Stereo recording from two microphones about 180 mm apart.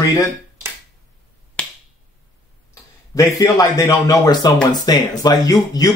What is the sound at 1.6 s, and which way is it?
Finger snapping, 5° left (ahead or behind).